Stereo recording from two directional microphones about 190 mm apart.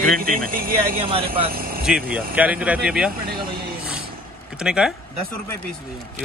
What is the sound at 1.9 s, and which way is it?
Speech, 5° right (ahead or behind).